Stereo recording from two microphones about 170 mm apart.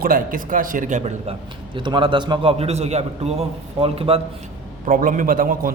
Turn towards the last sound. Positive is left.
turn(degrees=-55)  # may be behind; listen again after turning